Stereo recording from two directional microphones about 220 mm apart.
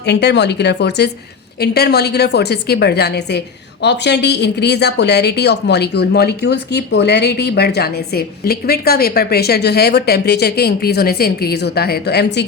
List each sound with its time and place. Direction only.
0.0 s a woman's voice: 50° left (ahead or behind)